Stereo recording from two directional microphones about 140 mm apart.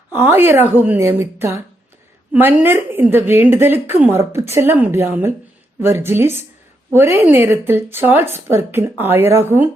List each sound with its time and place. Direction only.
0.1 s a woman's voice: 15° right (ahead or behind)